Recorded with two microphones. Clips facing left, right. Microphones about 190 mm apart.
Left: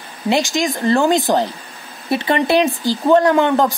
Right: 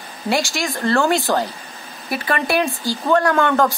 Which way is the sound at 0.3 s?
20° left (ahead or behind).